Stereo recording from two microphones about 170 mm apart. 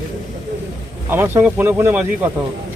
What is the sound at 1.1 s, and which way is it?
Speech, 15° right (ahead or behind).